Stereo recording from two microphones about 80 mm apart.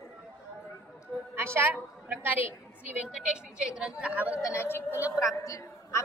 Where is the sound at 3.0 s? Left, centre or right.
Centre.